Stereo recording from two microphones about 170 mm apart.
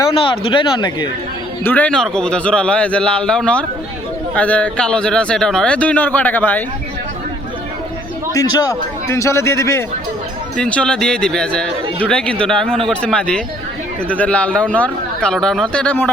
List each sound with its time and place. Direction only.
0.0 s speech: 30° left (ahead or behind)
1.6 s speech: 10° left (ahead or behind)
8.3 s speech: 20° left (ahead or behind)
10.6 s speech: 5° left (ahead or behind)